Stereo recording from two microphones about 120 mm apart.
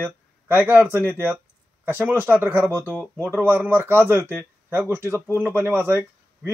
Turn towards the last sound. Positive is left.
turn(degrees=-20)  # may be behind; listen again after turning